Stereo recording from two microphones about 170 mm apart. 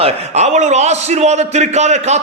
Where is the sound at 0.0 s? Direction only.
40° right (ahead or behind).